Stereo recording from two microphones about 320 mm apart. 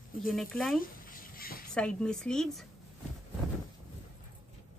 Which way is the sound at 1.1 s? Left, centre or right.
Left.